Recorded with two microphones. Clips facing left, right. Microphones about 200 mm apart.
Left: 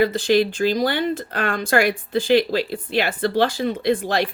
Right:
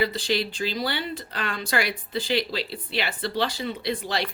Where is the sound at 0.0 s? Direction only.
50° left (ahead or behind).